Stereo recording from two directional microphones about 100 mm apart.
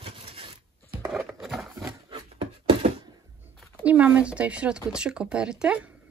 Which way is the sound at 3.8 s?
15° right (ahead or behind).